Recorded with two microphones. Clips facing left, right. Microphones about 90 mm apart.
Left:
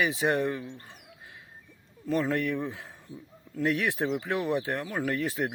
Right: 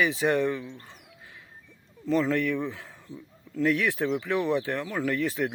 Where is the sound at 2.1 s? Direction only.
10° left (ahead or behind).